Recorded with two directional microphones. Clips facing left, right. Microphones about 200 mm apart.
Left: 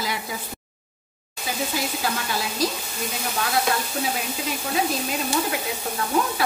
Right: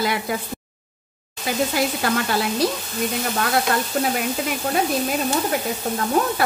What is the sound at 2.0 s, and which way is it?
Speech, 60° right (ahead or behind).